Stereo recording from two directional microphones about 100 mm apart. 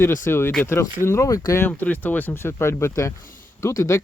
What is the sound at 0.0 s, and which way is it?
Speech, 25° left (ahead or behind).